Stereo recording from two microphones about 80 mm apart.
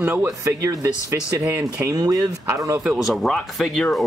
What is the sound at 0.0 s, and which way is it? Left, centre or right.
Speech, right.